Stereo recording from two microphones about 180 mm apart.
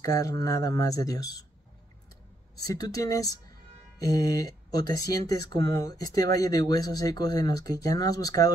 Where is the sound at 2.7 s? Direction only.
20° left (ahead or behind).